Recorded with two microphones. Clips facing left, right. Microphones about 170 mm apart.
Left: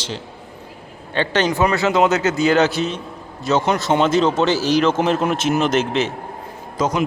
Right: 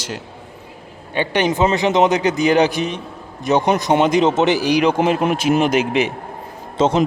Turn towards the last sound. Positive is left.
turn(degrees=-30)  # may be behind; listen again after turning